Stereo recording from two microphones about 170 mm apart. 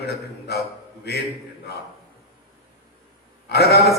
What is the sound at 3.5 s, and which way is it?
Speech, 75° left (ahead or behind).